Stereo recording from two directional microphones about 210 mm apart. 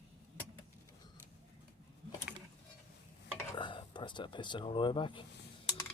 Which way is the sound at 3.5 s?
20° left (ahead or behind).